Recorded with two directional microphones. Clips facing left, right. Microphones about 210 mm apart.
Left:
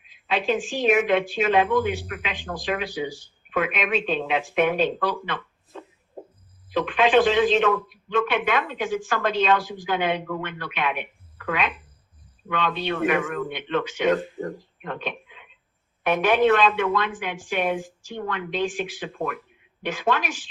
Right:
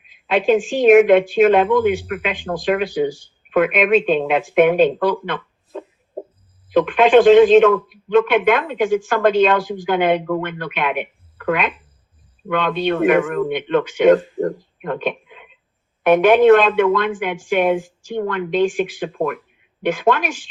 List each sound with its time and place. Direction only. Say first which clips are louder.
0.3 s speech: right 8 dB; 55° right (ahead or behind)